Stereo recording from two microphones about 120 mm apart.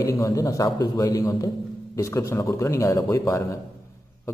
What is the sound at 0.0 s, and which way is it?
A man's voice, 30° left (ahead or behind).